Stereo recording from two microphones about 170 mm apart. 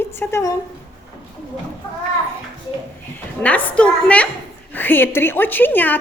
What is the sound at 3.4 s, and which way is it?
Speech, 10° left (ahead or behind).